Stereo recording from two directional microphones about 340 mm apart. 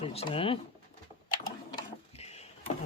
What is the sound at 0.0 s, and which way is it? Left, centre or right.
Speech, centre.